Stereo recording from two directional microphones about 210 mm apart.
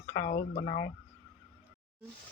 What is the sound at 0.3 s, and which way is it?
Speech, 45° left (ahead or behind).